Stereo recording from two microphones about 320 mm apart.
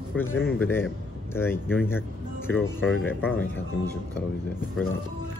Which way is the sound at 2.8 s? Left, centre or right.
Left.